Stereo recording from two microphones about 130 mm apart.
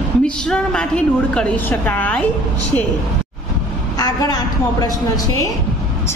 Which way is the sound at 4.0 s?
30° left (ahead or behind).